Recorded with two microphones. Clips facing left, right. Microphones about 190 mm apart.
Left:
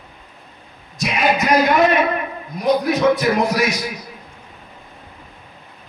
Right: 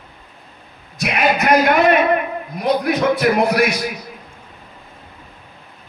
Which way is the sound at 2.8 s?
60° right (ahead or behind).